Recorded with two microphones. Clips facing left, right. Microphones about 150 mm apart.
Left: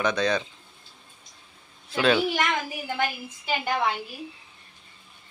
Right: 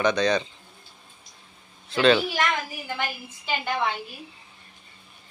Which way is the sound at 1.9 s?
5° left (ahead or behind).